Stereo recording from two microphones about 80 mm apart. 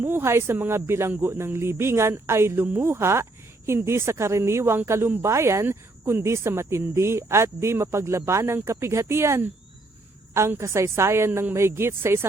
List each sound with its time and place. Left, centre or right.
0.0 s speech: right
10.6 s speech: right
11.3 s a man's voice: right
11.5 s speech: right